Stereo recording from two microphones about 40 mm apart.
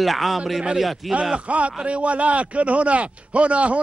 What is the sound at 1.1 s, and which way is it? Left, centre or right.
A man's voice, right.